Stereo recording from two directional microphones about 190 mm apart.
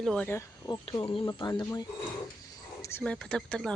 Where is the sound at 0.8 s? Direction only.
25° left (ahead or behind).